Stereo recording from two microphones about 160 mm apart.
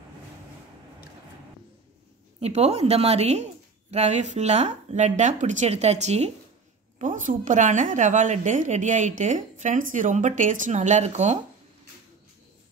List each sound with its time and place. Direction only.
2.4 s a woman's voice: 40° right (ahead or behind)
7.0 s a woman's voice: 55° right (ahead or behind)